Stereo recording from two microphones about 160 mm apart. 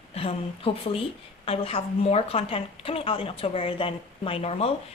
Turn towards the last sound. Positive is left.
turn(degrees=40)  # may be behind; listen again after turning